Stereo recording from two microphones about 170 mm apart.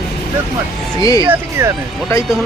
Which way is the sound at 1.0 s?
20° left (ahead or behind).